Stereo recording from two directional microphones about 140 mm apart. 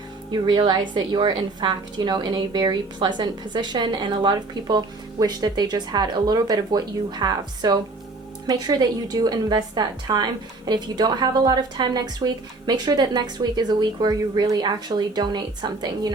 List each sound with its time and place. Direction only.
0.3 s a woman's voice: 30° right (ahead or behind)